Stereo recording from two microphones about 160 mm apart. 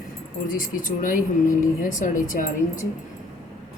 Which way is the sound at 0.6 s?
60° left (ahead or behind).